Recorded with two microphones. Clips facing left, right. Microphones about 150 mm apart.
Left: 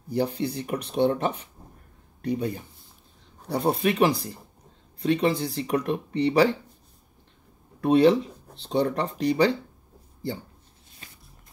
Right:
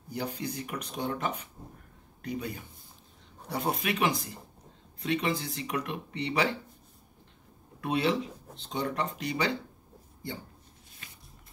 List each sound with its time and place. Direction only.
0.1 s speech: 30° left (ahead or behind)
7.8 s speech: 35° left (ahead or behind)